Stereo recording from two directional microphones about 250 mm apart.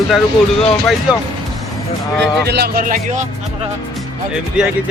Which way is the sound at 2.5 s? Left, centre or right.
Right.